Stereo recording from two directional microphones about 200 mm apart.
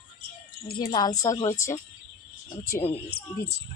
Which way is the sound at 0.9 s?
20° left (ahead or behind).